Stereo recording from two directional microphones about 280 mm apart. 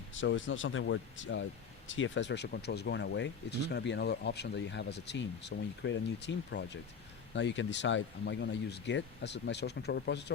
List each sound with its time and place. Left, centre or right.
0.1 s speech: left